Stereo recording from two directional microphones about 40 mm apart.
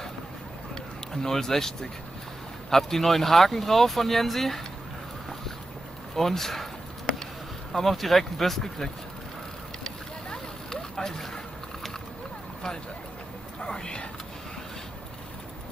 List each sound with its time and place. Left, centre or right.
1.1 s speech: centre
6.1 s speech: centre
7.7 s speech: centre
10.3 s boat: centre
13.6 s whispering: left